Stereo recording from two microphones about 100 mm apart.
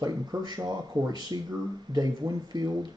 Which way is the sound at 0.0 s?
40° right (ahead or behind).